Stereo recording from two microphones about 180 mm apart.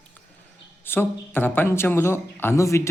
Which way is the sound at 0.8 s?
10° left (ahead or behind).